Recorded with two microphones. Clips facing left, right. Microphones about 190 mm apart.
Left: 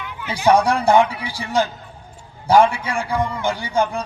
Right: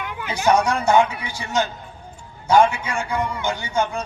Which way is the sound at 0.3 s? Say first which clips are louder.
Left 3 dB; 35° left (ahead or behind).